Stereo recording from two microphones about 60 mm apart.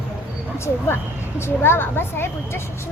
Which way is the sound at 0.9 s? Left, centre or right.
Left.